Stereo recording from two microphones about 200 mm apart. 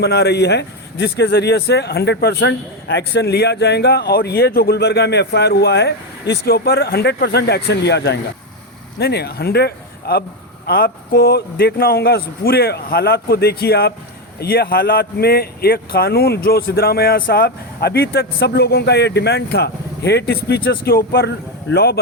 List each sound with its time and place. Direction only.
0.0 s a man's voice: 55° left (ahead or behind)